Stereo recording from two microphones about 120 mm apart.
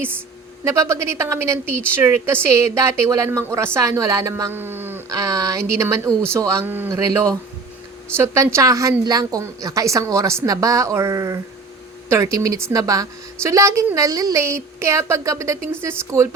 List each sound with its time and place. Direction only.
0.6 s a woman's voice: 25° right (ahead or behind)
5.0 s a woman's voice: 30° right (ahead or behind)